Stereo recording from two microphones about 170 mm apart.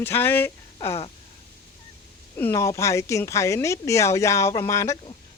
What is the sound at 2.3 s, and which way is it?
Speech, 15° left (ahead or behind).